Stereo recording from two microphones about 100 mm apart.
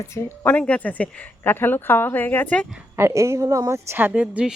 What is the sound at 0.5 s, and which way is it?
A woman's voice, 15° left (ahead or behind).